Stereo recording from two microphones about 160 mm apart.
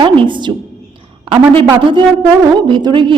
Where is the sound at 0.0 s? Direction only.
30° right (ahead or behind).